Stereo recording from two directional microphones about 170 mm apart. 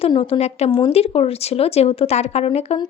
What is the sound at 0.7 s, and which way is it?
A woman's voice, 25° left (ahead or behind).